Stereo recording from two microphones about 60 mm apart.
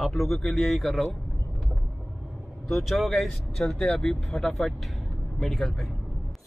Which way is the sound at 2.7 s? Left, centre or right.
Centre.